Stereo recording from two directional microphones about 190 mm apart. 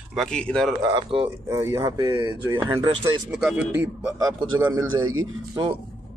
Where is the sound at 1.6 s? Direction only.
15° right (ahead or behind).